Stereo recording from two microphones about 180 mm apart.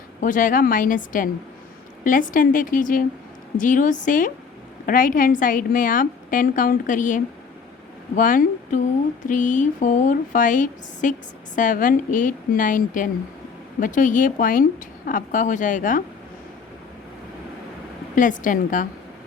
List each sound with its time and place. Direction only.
0.2 s a woman's voice: 45° left (ahead or behind)
18.1 s a woman's voice: 45° left (ahead or behind)